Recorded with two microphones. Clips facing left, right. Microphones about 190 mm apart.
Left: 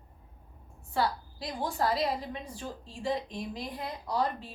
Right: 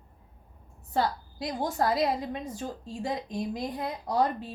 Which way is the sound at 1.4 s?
40° right (ahead or behind).